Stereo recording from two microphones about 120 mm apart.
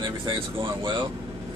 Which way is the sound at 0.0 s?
40° right (ahead or behind).